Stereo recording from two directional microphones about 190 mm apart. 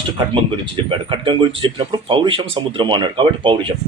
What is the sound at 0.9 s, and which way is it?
Speech, 25° right (ahead or behind).